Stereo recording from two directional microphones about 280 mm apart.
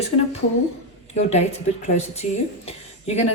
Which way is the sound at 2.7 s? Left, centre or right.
Left.